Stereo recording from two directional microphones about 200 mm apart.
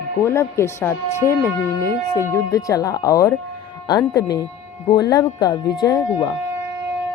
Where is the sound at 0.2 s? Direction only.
15° left (ahead or behind).